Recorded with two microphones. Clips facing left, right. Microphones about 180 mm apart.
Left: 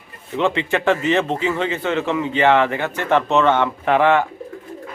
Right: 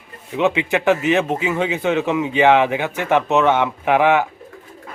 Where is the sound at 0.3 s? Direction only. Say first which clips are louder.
Right 1 dB; 10° right (ahead or behind).